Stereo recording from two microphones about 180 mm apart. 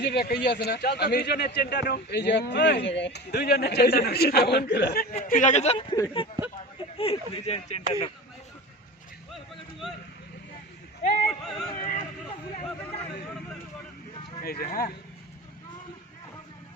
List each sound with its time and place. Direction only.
0.0 s speech: 60° left (ahead or behind)
5.2 s speech: 45° left (ahead or behind)
6.4 s a sound: 20° right (ahead or behind)
6.9 s speech: 30° left (ahead or behind)
11.3 s yodeling: 5° left (ahead or behind)
11.8 s a sound: 50° left (ahead or behind)
14.4 s speech: 55° left (ahead or behind)